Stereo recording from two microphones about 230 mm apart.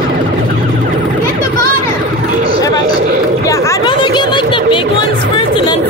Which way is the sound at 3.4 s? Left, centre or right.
Centre.